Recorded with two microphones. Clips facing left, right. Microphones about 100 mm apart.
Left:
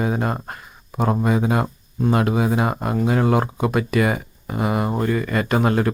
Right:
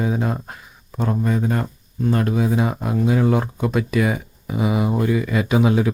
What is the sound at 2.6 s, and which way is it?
Speech, centre (ahead or behind).